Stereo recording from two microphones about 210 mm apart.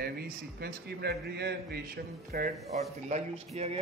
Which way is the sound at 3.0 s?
30° right (ahead or behind).